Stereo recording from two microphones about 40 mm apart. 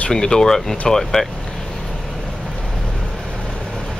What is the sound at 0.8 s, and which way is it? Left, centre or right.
Vehicle, centre.